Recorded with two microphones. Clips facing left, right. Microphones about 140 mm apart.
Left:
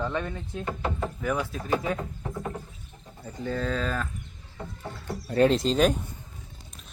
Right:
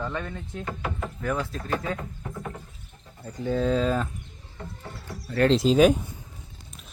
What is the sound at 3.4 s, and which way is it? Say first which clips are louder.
Speech: right 5 dB; 10° right (ahead or behind).